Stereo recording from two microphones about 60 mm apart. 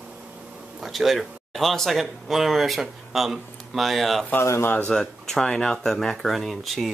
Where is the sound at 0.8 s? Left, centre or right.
Centre.